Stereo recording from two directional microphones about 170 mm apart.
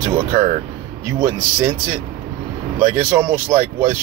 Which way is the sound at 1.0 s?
15° right (ahead or behind).